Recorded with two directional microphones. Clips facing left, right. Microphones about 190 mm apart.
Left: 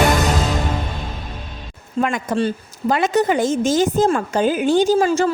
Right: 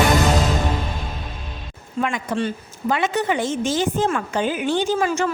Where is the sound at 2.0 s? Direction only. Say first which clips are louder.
Left 3 dB; 45° left (ahead or behind).